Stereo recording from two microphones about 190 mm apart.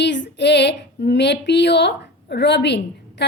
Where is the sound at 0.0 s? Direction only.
65° left (ahead or behind).